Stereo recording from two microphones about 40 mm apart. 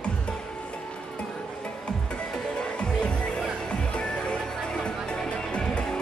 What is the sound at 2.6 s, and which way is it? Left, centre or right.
Music, left.